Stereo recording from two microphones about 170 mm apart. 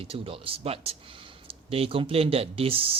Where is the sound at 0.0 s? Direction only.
35° right (ahead or behind).